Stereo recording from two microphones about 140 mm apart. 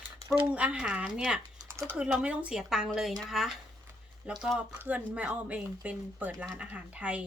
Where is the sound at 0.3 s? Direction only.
10° right (ahead or behind).